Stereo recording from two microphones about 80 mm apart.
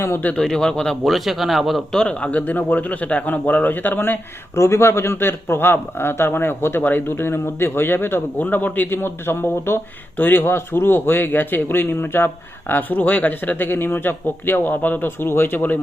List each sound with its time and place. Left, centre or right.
0.0 s speech: left
0.3 s speech: centre; by 4.2 s left
4.5 s speech: left